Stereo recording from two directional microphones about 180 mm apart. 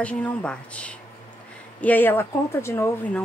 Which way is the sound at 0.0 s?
5° left (ahead or behind).